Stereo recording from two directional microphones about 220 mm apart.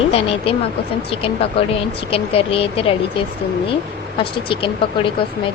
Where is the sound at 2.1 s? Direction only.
25° left (ahead or behind).